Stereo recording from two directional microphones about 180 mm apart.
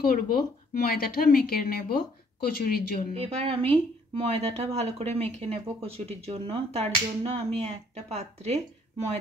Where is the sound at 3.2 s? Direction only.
35° right (ahead or behind).